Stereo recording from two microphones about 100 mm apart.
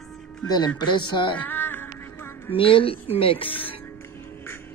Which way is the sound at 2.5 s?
60° left (ahead or behind).